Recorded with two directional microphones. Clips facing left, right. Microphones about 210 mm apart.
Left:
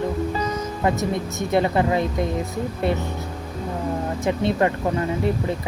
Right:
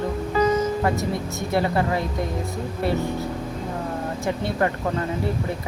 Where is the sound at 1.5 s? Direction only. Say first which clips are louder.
Left 3 dB; 20° left (ahead or behind).